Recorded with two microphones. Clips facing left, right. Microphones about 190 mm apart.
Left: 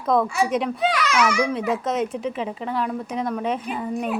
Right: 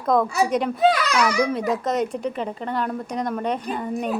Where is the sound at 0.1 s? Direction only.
Centre (ahead or behind).